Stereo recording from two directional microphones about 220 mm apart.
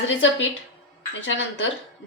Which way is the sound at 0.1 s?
60° left (ahead or behind).